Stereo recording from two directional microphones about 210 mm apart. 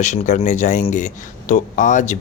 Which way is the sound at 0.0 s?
35° left (ahead or behind).